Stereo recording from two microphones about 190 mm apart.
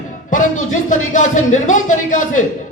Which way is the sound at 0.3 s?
40° left (ahead or behind).